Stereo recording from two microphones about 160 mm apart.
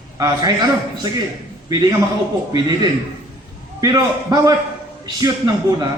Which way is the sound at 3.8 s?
25° right (ahead or behind).